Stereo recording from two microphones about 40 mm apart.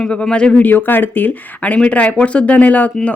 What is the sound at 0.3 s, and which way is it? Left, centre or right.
Speech, left.